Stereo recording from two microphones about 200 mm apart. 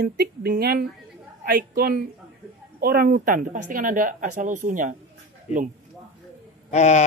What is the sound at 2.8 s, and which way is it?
Speech, 50° right (ahead or behind).